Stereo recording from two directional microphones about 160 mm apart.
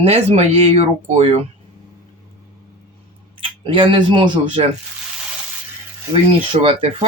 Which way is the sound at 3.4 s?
35° right (ahead or behind).